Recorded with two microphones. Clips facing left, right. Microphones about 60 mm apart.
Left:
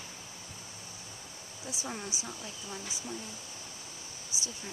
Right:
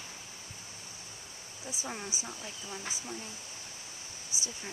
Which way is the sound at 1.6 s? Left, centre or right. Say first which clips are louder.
Even; centre.